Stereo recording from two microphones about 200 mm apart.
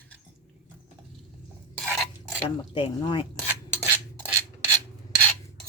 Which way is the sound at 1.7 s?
5° left (ahead or behind).